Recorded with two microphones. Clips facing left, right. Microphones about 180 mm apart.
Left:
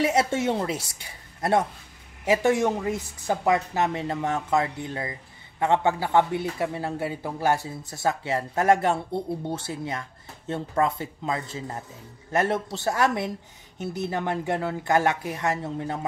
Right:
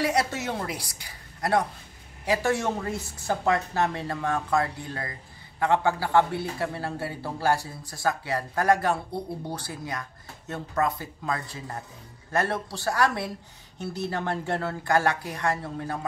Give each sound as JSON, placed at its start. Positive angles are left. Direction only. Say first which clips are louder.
{"t": 0.0, "sound": "speech", "louder": "left 3 dB", "side_deg": 25}